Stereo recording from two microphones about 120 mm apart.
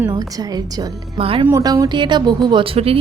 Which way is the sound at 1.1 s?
50° right (ahead or behind).